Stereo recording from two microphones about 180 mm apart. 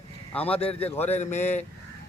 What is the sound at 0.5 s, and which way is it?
A man's voice, 35° left (ahead or behind).